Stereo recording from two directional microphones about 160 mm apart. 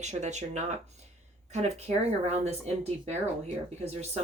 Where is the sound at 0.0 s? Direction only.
45° right (ahead or behind).